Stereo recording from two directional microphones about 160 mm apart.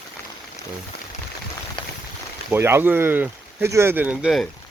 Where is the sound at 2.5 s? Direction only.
15° right (ahead or behind).